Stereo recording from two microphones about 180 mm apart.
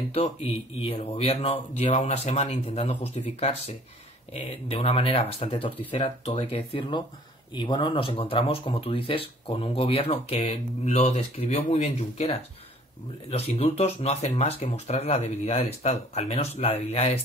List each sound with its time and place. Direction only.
0.1 s speech: 35° left (ahead or behind)